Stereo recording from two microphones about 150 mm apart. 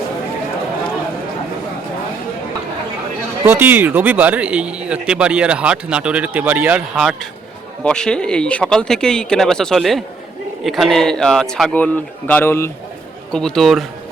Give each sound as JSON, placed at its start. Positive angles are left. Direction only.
{"t": 3.4, "sound": "speech", "side_deg": -15}
{"t": 13.3, "sound": "speech", "side_deg": 5}